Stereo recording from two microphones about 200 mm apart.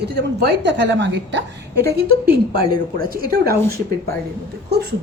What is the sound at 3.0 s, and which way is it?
Speech, 45° right (ahead or behind).